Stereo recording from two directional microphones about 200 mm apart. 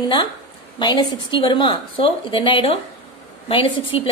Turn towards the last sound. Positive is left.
turn(degrees=25)  # may be behind; listen again after turning